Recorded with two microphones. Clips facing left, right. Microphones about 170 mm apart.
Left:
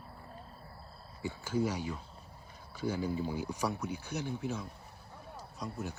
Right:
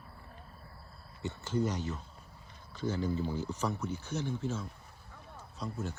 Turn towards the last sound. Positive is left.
turn(degrees=15)  # may be behind; listen again after turning